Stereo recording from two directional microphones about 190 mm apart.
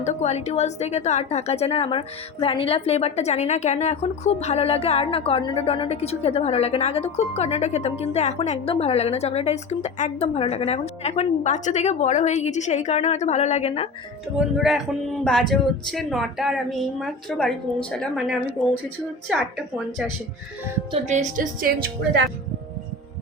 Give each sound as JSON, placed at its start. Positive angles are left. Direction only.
{"t": 0.0, "sound": "a woman's voice", "side_deg": 35}
{"t": 14.3, "sound": "speech", "side_deg": 0}
{"t": 19.3, "sound": "speech", "side_deg": -5}
{"t": 21.1, "sound": "a woman's voice", "side_deg": -40}